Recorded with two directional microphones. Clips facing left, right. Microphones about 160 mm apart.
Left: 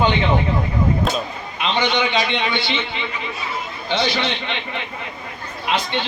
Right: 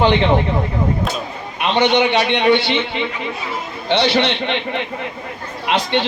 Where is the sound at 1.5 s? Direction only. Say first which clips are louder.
Right 5 dB; 65° right (ahead or behind).